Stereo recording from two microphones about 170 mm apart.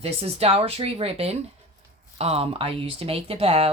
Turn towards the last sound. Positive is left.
turn(degrees=-35)  # may be behind; listen again after turning